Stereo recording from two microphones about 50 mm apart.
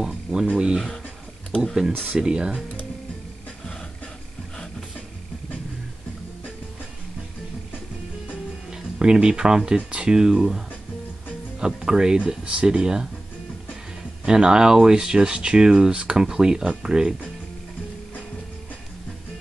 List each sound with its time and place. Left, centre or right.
0.0 s speech: centre
0.7 s speech: centre
2.1 s speech: centre
8.6 s speech: centre
11.6 s speech: centre
14.2 s speech: centre